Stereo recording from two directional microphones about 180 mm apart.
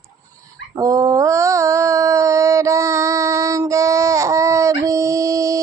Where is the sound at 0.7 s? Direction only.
20° right (ahead or behind).